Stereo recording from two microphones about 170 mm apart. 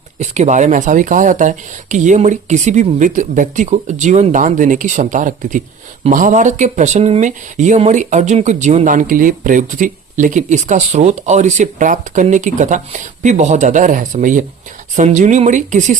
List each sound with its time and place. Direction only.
0.2 s speech: 45° right (ahead or behind)